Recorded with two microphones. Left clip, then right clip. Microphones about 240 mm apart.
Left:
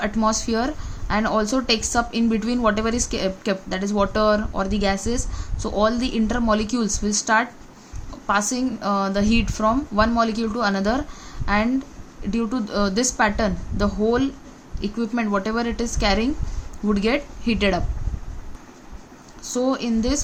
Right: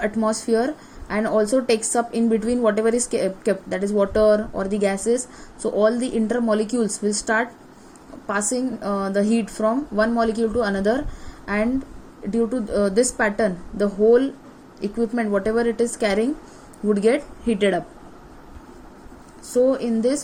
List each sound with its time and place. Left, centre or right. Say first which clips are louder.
0.0 s a woman's voice: left 1 dB; left
19.5 s a woman's voice: right 4 dB; left